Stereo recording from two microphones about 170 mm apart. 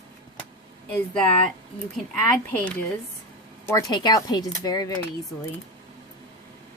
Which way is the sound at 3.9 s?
25° left (ahead or behind).